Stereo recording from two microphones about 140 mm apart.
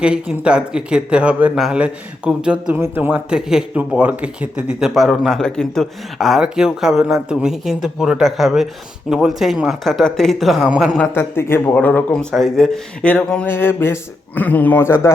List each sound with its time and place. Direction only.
0.0 s speech: 5° right (ahead or behind)
11.1 s speech: 15° left (ahead or behind)